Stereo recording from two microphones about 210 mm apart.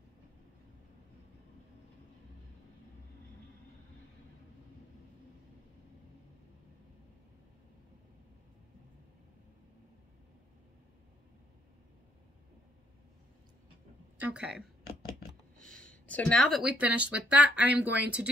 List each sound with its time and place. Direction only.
14.1 s speech: 5° right (ahead or behind)